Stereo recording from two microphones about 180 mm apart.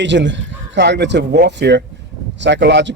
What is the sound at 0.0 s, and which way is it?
A man's voice, 80° right.